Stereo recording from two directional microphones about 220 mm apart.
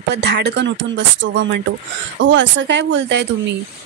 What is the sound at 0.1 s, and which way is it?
A woman's voice, 50° right (ahead or behind).